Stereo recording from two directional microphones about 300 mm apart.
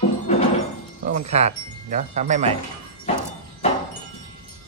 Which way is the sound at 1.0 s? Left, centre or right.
Right.